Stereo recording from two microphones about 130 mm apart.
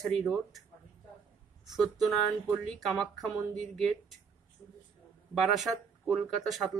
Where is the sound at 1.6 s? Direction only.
Centre (ahead or behind).